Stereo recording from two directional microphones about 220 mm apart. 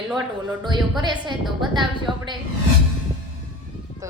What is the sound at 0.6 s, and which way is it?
Speech, 20° right (ahead or behind).